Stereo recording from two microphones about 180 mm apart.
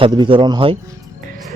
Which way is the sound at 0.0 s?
25° right (ahead or behind).